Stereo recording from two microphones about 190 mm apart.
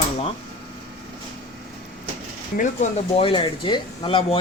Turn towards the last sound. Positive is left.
turn(degrees=25)  # may be behind; listen again after turning